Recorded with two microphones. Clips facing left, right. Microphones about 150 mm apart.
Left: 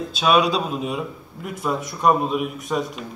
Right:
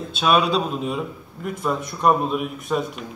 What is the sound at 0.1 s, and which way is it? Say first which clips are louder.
A man's voice: even; centre (ahead or behind).